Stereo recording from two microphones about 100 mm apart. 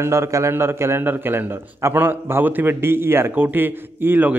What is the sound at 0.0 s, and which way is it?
A man's voice, 25° right (ahead or behind).